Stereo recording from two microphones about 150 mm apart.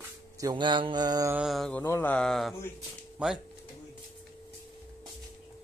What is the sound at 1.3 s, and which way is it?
Mantra, centre (ahead or behind).